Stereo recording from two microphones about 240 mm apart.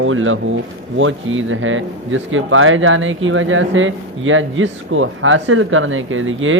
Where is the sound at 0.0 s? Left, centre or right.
Right.